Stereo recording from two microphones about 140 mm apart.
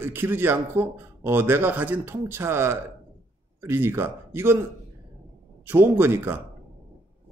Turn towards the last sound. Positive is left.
turn(degrees=-15)  # may be behind; listen again after turning